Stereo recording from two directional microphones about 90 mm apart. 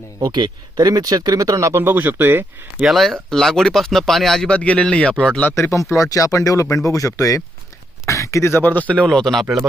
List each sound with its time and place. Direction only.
0.2 s speech: 55° right (ahead or behind); by 2.4 s 25° right (ahead or behind)
2.8 s speech: centre (ahead or behind)
5.5 s speech: 35° left (ahead or behind); by 9.0 s 15° left (ahead or behind)
9.0 s speech: 5° left (ahead or behind)